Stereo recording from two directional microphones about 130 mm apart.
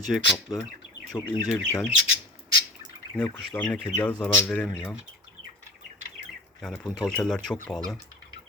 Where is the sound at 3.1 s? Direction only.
15° left (ahead or behind).